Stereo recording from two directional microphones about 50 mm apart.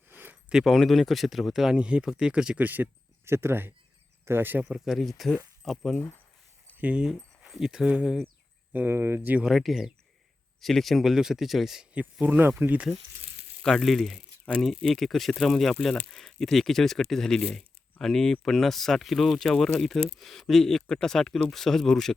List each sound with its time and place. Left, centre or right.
0.1 s a sound: right
0.6 s speech: centre
1.7 s speech: centre
2.6 s speech: right
3.2 s speech: right
4.9 s speech: centre
6.7 s speech: right
7.5 s speech: centre
8.7 s speech: right
9.6 s speech: centre
12.2 s speech: right
13.6 s speech: centre
13.8 s speech: centre